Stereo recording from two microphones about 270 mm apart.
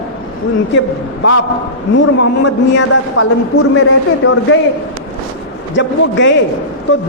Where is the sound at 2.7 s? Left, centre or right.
Left.